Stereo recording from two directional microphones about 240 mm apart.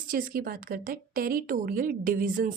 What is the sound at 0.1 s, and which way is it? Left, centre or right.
Speech, right.